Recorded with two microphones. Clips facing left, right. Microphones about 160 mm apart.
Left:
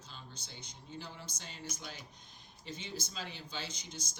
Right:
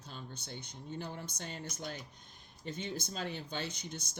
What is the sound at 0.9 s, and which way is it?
Speech, 55° right (ahead or behind).